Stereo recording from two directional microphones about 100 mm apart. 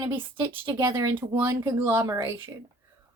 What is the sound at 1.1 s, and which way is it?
A woman's voice, 25° right (ahead or behind).